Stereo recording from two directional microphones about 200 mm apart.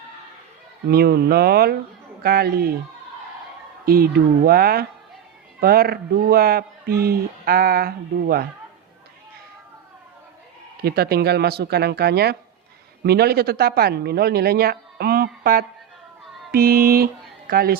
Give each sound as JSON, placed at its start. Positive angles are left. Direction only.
{"t": 0.9, "sound": "speech", "side_deg": -50}
{"t": 3.8, "sound": "speech", "side_deg": -50}
{"t": 10.8, "sound": "speech", "side_deg": -50}
{"t": 16.5, "sound": "music", "side_deg": -50}